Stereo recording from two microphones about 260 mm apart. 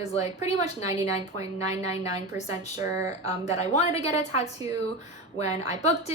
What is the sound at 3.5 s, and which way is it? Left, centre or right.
Speech, left.